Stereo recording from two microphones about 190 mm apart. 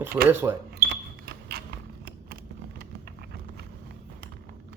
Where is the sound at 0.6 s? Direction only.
55° right (ahead or behind).